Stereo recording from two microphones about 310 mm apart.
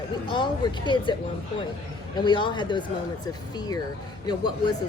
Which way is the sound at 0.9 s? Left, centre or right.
Centre.